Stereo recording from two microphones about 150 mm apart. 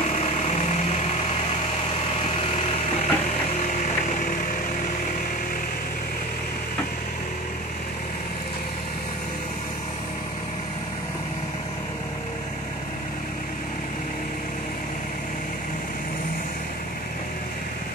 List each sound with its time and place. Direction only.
0.1 s engine: 50° left (ahead or behind)
2.2 s a sound: 45° left (ahead or behind)
3.5 s engine: 55° left (ahead or behind)